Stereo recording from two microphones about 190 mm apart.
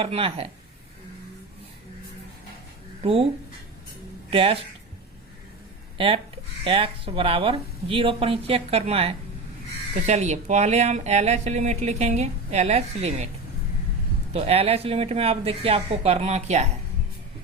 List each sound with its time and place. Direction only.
0.0 s speech: 30° right (ahead or behind)
3.0 s speech: 30° right (ahead or behind)
4.3 s speech: 30° right (ahead or behind)
6.7 s speech: 30° right (ahead or behind)
14.3 s speech: 30° right (ahead or behind)